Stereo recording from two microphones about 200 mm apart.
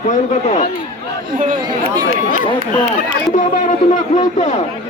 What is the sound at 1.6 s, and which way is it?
Speech, 20° right (ahead or behind).